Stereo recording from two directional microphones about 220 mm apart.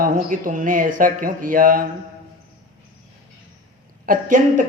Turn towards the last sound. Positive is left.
turn(degrees=-35)  # may be behind; listen again after turning